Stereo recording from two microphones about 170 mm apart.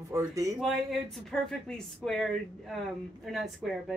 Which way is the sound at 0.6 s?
Centre (ahead or behind).